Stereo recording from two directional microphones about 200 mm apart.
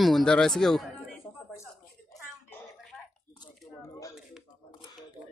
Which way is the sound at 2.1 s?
Centre (ahead or behind).